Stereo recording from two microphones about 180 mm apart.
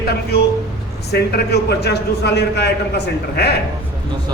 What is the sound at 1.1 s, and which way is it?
A man's voice, 65° left (ahead or behind).